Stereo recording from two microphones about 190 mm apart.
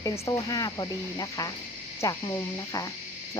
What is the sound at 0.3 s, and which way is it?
Speech, 20° left (ahead or behind).